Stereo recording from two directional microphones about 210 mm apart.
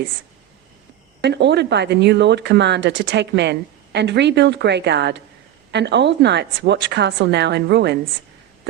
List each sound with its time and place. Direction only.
1.2 s speech: 55° right (ahead or behind)